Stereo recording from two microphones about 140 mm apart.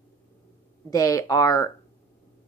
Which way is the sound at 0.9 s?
25° left (ahead or behind).